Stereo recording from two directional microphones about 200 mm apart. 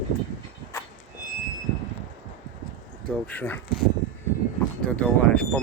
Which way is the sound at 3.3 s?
10° left (ahead or behind).